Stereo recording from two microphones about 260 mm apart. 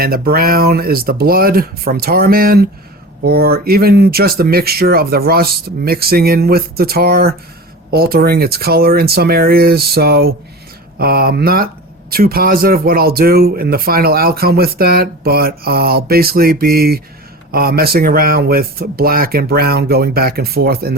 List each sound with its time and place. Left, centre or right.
0.0 s speech: right